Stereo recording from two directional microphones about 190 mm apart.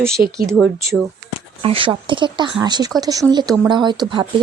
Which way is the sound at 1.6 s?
30° right (ahead or behind).